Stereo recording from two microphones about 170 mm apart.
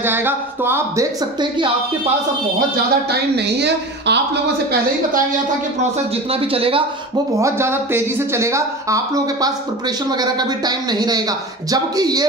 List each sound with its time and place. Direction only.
0.0 s speech: 15° right (ahead or behind)
2.7 s speech: 75° right (ahead or behind)
6.3 s speech: 35° right (ahead or behind)
7.3 s speech: 15° right (ahead or behind)